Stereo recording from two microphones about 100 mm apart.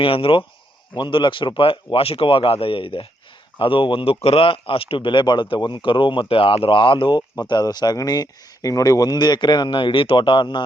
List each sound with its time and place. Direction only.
0.0 s speech: 60° left (ahead or behind)
0.9 s speech: 50° left (ahead or behind)